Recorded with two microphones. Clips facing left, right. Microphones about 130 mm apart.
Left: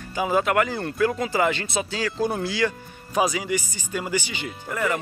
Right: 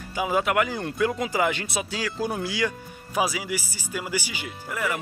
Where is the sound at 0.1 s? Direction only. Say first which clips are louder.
Left 2 dB; 10° right (ahead or behind).